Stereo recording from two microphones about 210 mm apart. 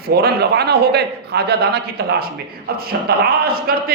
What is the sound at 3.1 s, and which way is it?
Speech, 45° right (ahead or behind).